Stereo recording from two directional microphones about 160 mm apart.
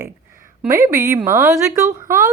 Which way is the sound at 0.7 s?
15° right (ahead or behind).